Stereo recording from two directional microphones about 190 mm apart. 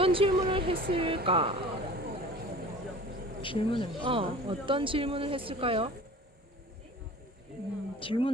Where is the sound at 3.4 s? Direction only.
25° left (ahead or behind).